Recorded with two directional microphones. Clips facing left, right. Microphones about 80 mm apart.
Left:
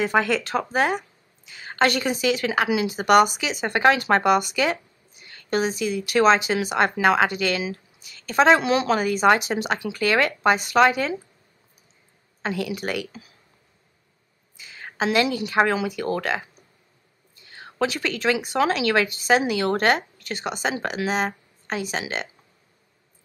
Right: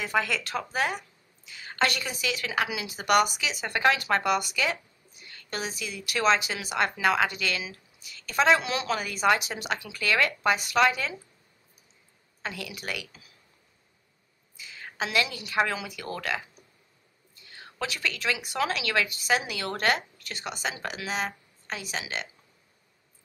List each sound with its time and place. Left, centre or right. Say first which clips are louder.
0.0 s speech: left 7 dB; left
12.4 s speech: left 10 dB; left
14.6 s a sound: left 7 dB; left
15.4 s speech: left 7 dB; left
17.6 s a sound: left 7 dB; left
18.2 s speech: left 8 dB; left